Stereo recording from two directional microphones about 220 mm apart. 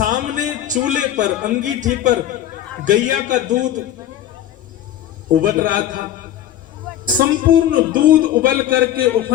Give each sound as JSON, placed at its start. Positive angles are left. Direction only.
{"t": 0.0, "sound": "a man's voice", "side_deg": -35}
{"t": 5.4, "sound": "a man's voice", "side_deg": -40}
{"t": 7.0, "sound": "a man's voice", "side_deg": -40}